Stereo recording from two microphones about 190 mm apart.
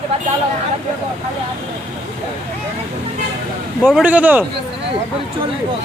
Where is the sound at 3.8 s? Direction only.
5° right (ahead or behind).